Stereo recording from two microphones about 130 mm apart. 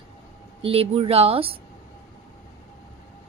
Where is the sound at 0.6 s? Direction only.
45° right (ahead or behind).